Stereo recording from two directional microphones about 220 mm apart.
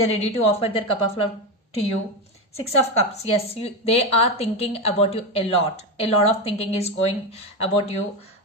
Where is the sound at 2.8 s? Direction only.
30° left (ahead or behind).